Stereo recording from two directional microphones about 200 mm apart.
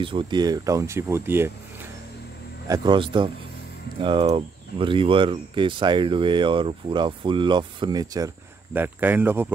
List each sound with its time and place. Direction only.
0.0 s speech: 25° right (ahead or behind)
2.7 s speech: 20° right (ahead or behind)